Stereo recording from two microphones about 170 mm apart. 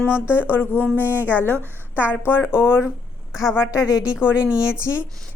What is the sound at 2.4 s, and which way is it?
Speech, 5° right (ahead or behind).